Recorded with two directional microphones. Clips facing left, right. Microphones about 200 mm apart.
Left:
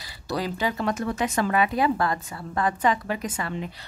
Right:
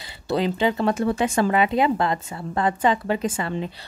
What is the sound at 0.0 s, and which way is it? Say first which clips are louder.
Speech: right 6 dB; 25° right (ahead or behind).